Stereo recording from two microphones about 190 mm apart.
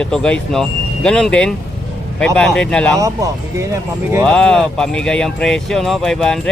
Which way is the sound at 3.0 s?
15° right (ahead or behind).